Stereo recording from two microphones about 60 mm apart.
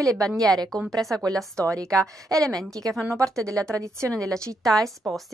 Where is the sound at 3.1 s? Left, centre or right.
Right.